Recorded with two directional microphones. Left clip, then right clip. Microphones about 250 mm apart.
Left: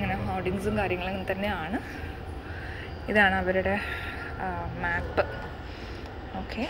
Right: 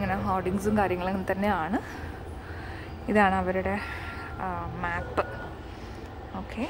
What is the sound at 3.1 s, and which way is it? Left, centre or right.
A woman's voice, centre.